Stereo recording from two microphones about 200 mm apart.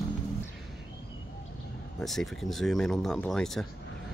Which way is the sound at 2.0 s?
Centre (ahead or behind).